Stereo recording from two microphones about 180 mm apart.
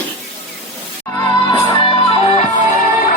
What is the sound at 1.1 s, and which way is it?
Music, 25° left (ahead or behind).